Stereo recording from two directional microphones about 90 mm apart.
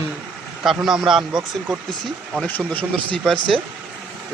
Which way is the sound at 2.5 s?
20° left (ahead or behind).